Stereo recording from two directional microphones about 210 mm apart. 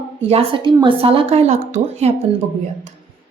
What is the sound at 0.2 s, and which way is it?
A woman's voice, 30° right (ahead or behind).